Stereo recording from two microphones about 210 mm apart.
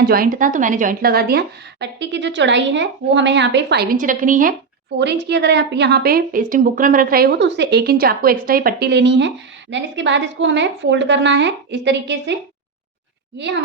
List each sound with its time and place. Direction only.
0.0 s speech: 45° right (ahead or behind)
4.9 s a woman's voice: 55° right (ahead or behind)